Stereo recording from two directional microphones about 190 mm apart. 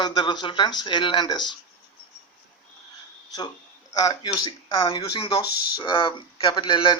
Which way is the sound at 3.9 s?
20° left (ahead or behind).